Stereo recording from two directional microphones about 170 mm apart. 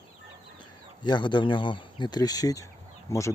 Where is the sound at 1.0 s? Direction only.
25° left (ahead or behind).